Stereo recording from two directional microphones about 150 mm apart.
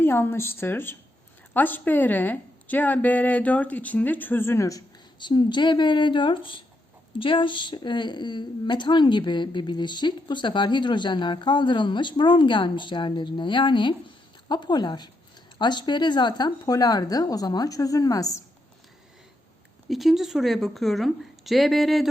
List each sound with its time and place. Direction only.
0.0 s a woman's voice: 15° left (ahead or behind)
5.2 s a woman's voice: 30° left (ahead or behind)
19.9 s a woman's voice: centre (ahead or behind)